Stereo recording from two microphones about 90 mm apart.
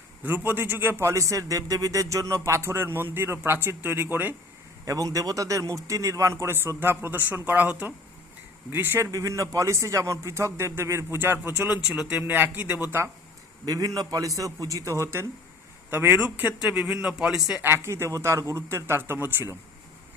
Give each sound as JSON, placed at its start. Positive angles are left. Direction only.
{"t": 0.2, "sound": "a man's voice", "side_deg": -20}
{"t": 4.9, "sound": "speech", "side_deg": -40}
{"t": 11.9, "sound": "a man's voice", "side_deg": -10}
{"t": 12.2, "sound": "a man's voice", "side_deg": -25}
{"t": 13.7, "sound": "a man's voice", "side_deg": -40}
{"t": 17.6, "sound": "a man's voice", "side_deg": -25}